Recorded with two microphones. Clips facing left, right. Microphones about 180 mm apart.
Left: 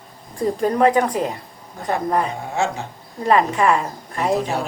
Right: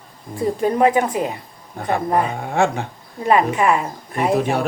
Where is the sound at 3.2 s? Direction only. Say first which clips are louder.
Right 1 dB; 10° right (ahead or behind).